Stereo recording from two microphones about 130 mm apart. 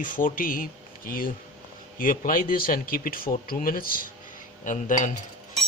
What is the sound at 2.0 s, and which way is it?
Speech, 90° left.